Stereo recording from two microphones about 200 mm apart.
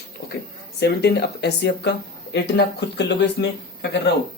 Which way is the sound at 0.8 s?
55° left (ahead or behind).